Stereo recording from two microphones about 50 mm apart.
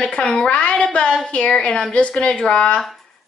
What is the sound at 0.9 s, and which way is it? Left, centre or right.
Child singing, centre.